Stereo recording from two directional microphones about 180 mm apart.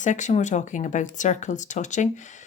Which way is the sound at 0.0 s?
40° left (ahead or behind).